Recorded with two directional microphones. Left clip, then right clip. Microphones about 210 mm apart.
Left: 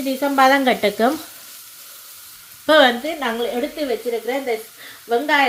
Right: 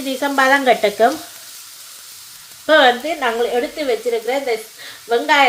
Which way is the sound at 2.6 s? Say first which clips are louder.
Right 2 dB; 55° left (ahead or behind).